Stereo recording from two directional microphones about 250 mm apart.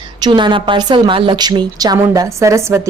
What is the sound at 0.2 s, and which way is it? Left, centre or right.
A woman's voice, centre.